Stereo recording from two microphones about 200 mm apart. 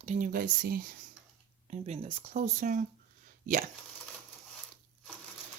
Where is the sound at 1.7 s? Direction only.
30° right (ahead or behind).